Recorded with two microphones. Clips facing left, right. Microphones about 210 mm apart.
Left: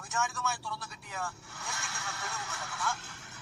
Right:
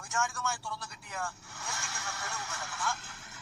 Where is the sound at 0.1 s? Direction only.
Centre (ahead or behind).